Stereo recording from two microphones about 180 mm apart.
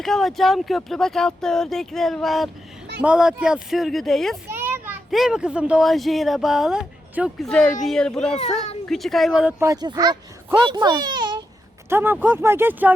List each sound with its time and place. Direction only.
0.0 s speech: centre (ahead or behind)
4.4 s a child's voice: 10° right (ahead or behind)
9.6 s a child's voice: 20° right (ahead or behind)
11.9 s speech: 10° right (ahead or behind)